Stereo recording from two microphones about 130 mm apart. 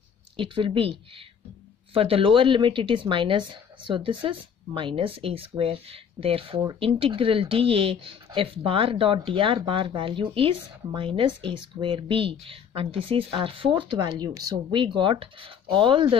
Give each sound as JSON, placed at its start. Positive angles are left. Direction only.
{"t": 0.4, "sound": "speech", "side_deg": -40}
{"t": 2.0, "sound": "speech", "side_deg": -45}